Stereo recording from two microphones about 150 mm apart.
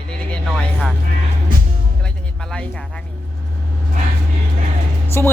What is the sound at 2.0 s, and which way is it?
Music, 5° left (ahead or behind).